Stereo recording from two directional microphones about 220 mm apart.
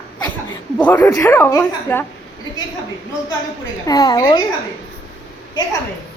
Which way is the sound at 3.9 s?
15° left (ahead or behind).